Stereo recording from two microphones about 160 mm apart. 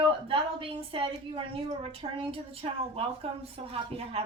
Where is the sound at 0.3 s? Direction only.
35° right (ahead or behind).